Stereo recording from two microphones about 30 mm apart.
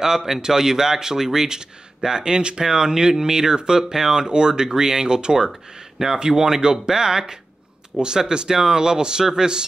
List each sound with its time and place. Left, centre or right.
0.0 s speech: centre